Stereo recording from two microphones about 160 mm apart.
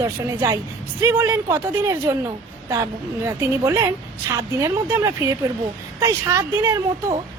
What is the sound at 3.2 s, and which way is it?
A woman's voice, 15° right (ahead or behind).